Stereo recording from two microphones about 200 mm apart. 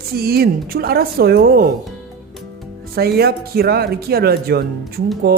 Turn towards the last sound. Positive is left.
turn(degrees=-50)  # may be behind; listen again after turning